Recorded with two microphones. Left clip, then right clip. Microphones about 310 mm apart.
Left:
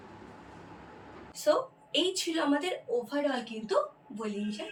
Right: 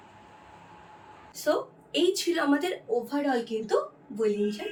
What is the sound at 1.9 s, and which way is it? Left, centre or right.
Speech, centre.